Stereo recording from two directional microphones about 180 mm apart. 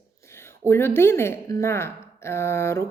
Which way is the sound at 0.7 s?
15° left (ahead or behind).